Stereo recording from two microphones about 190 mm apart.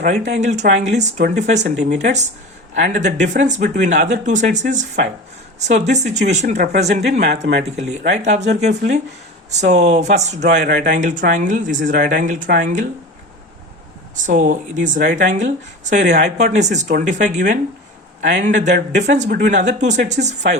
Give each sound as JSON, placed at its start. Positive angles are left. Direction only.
{"t": 0.0, "sound": "speech", "side_deg": -40}
{"t": 7.3, "sound": "speech", "side_deg": -60}
{"t": 7.8, "sound": "speech", "side_deg": -40}
{"t": 14.3, "sound": "speech", "side_deg": -45}